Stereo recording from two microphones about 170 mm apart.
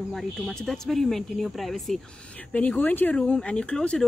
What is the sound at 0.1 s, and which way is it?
Speech, centre (ahead or behind).